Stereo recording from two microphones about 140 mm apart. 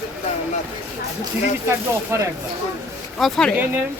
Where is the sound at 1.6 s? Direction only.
20° right (ahead or behind).